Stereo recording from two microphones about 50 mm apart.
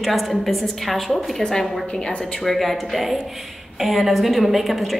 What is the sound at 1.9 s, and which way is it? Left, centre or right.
Speech, left.